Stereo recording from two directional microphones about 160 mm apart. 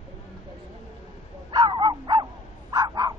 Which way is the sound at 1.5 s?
25° right (ahead or behind).